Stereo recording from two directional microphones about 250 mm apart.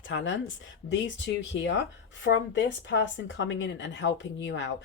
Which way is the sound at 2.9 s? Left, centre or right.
Left.